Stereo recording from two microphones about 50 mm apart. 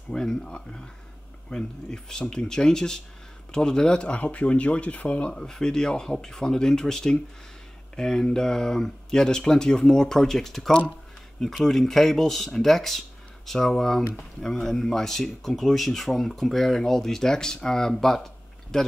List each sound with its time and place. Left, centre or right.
0.1 s speech: centre
5.3 s speech: centre